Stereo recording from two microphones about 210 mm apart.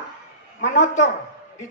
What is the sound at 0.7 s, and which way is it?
Speech, 35° left (ahead or behind).